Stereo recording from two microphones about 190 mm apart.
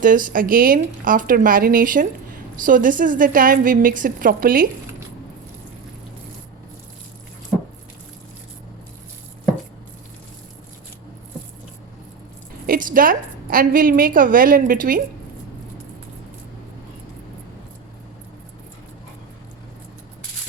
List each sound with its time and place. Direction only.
0.0 s speech: 45° right (ahead or behind)
12.6 s speech: 50° right (ahead or behind)